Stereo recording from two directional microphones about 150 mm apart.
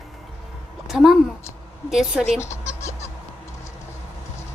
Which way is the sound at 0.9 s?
Centre (ahead or behind).